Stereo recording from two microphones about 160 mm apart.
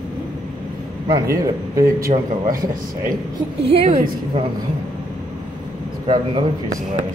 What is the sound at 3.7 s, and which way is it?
Speech, 35° right (ahead or behind).